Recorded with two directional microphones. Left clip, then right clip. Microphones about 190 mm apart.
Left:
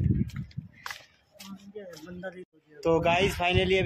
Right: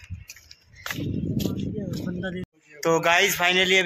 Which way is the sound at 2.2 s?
40° right (ahead or behind).